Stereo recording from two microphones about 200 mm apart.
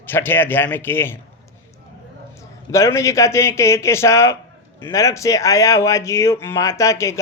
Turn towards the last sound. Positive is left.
turn(degrees=15)  # may be behind; listen again after turning